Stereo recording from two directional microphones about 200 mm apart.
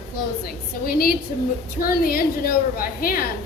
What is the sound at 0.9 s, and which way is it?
A woman's voice, 50° left (ahead or behind).